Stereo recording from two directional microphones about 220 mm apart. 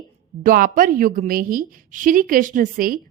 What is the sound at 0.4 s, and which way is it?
A woman's voice, 40° right (ahead or behind).